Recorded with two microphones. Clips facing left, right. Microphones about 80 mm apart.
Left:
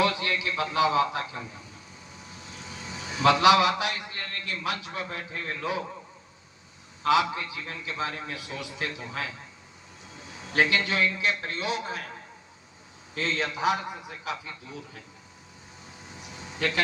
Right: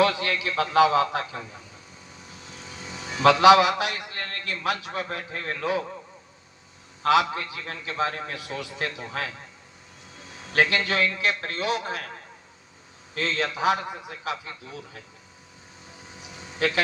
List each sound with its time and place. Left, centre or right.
0.0 s a man's voice: right
3.4 s a man's voice: right
7.0 s a man's voice: right
10.5 s a man's voice: right
13.1 s a man's voice: right